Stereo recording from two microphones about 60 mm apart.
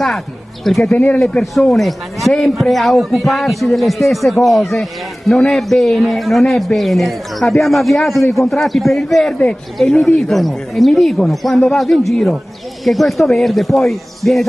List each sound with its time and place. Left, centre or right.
0.7 s a man's voice: centre
0.9 s speech: left
1.4 s a man's voice: centre